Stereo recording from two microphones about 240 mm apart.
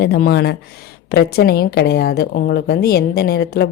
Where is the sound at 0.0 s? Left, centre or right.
Left.